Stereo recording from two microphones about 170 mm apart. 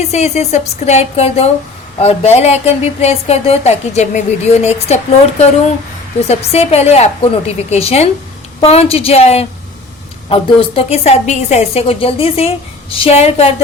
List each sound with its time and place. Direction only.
0.1 s a woman's voice: 40° left (ahead or behind)
6.1 s a woman's voice: 40° left (ahead or behind)